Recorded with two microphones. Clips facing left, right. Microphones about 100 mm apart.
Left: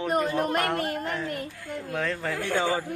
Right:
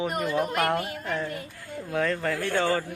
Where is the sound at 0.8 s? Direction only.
55° left (ahead or behind).